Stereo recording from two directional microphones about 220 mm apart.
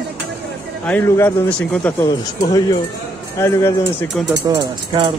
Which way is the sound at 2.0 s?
15° left (ahead or behind).